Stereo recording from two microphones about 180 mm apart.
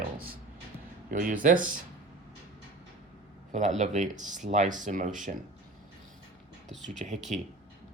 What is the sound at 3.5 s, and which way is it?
Speech, 40° right (ahead or behind).